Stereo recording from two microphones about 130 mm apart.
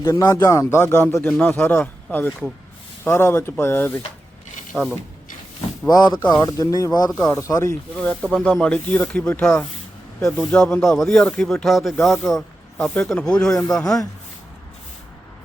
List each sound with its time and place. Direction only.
0.0 s speech: 25° left (ahead or behind)
4.7 s speech: centre (ahead or behind)
5.9 s speech: 35° left (ahead or behind)
7.9 s speech: 5° left (ahead or behind)